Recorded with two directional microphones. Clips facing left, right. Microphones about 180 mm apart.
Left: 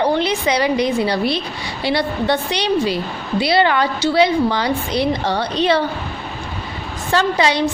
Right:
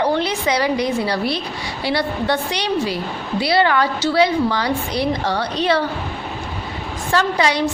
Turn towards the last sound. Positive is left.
turn(degrees=25)  # may be behind; listen again after turning